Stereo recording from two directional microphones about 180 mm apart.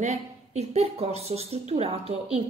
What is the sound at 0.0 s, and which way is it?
A woman's voice, 40° right (ahead or behind).